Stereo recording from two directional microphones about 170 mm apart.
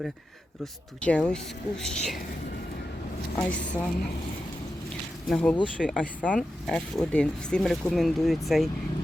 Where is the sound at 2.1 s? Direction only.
65° left (ahead or behind).